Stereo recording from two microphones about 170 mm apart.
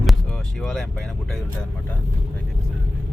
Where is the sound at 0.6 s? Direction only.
Centre (ahead or behind).